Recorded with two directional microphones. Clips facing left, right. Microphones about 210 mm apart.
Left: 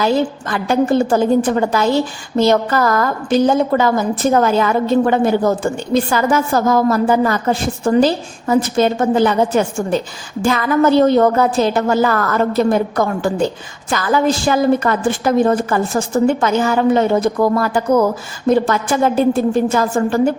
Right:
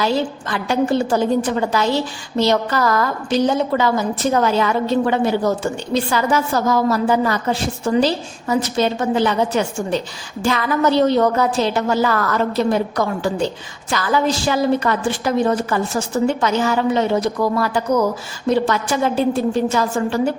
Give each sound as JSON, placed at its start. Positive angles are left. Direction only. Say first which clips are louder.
{"t": 0.0, "sound": "a woman's voice", "louder": "left 3 dB", "side_deg": 45}